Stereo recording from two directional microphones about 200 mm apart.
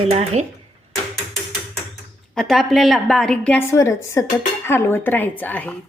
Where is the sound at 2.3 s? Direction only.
Centre (ahead or behind).